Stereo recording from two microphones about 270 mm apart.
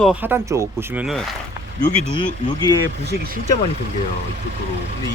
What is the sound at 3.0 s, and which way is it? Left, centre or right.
Speech, right.